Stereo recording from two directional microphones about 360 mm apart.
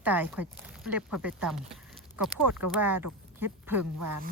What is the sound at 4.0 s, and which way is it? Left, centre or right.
Speech, right.